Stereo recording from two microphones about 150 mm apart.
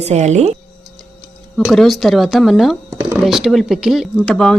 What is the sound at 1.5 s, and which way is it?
A woman's voice, centre (ahead or behind).